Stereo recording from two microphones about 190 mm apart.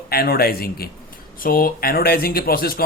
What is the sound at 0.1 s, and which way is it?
Speech, 55° left (ahead or behind).